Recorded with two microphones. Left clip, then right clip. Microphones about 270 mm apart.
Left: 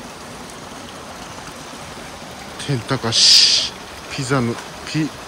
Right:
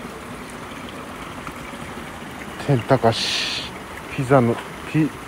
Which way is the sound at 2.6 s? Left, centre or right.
Centre.